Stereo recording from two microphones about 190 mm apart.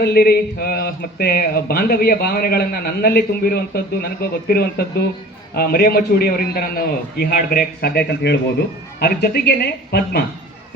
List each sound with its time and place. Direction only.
0.0 s a man's voice: 55° left (ahead or behind)